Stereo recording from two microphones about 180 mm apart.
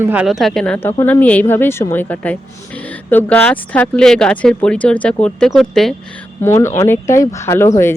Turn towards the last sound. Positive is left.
turn(degrees=15)  # may be behind; listen again after turning